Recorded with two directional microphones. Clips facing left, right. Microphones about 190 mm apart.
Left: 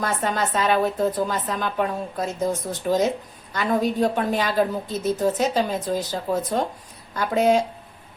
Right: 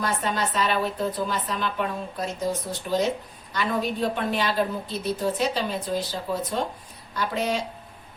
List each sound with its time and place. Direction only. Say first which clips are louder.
0.0 s speech: left 2 dB; 50° left (ahead or behind)
4.1 s speech: left 3 dB; 45° left (ahead or behind)